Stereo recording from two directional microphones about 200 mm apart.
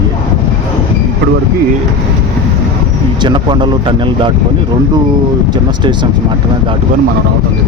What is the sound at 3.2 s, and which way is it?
Speech, 25° right (ahead or behind).